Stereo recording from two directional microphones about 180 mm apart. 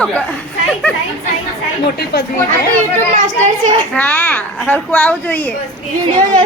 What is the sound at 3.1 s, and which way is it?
Speech, 40° right (ahead or behind).